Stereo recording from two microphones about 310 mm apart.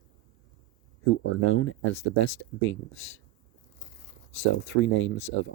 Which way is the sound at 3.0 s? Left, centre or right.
Left.